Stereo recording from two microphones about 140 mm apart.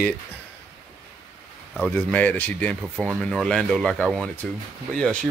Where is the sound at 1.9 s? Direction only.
10° left (ahead or behind).